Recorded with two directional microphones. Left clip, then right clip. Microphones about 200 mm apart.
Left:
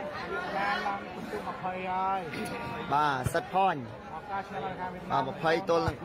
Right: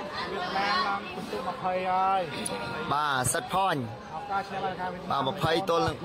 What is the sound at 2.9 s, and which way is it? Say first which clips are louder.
Speech: even; 25° right (ahead or behind).